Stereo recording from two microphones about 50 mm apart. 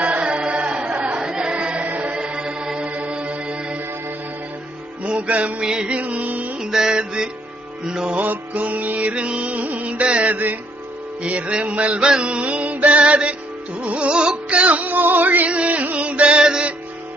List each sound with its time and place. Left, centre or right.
0.0 s singing: right
2.1 s music: centre
5.0 s music: right
6.0 s music: right
6.6 s music: centre
8.1 s music: right
10.3 s music: right
15.4 s music: right